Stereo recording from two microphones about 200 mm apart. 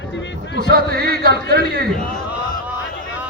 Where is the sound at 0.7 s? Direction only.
50° right (ahead or behind).